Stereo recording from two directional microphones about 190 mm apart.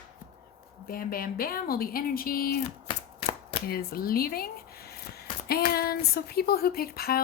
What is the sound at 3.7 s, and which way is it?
Speech, 50° left (ahead or behind).